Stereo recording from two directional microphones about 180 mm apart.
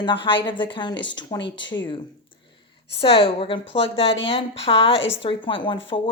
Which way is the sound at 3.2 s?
30° left (ahead or behind).